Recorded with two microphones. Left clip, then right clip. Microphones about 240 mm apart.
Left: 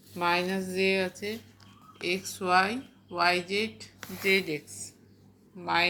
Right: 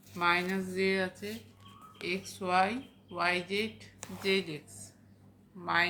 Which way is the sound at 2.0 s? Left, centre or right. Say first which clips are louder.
Left 5 dB; centre.